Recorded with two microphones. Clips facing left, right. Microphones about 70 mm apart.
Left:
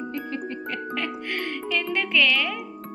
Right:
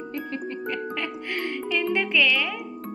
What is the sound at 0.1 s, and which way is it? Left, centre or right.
Music, centre.